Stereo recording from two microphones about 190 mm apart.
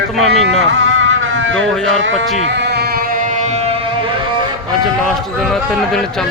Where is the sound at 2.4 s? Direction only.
65° right (ahead or behind).